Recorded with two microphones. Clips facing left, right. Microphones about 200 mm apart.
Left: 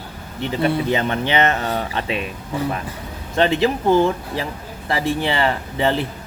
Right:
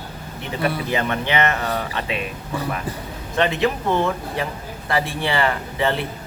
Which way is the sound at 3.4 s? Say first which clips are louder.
Left 3 dB; 30° left (ahead or behind).